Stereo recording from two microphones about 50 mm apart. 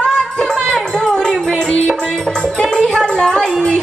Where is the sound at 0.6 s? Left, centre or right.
Centre.